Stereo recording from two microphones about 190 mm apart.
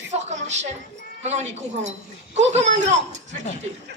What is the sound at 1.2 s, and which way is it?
Speech, 35° right (ahead or behind).